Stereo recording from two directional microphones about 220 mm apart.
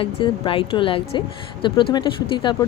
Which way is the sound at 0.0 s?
25° left (ahead or behind).